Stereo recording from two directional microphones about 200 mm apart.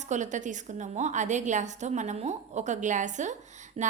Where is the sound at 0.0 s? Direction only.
35° right (ahead or behind).